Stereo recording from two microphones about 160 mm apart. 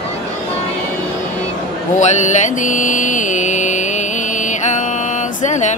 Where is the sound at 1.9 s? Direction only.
50° left (ahead or behind).